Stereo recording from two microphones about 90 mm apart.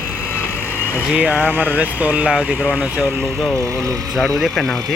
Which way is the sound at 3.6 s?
40° right (ahead or behind).